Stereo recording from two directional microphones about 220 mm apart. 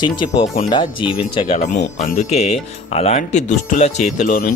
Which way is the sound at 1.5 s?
35° left (ahead or behind).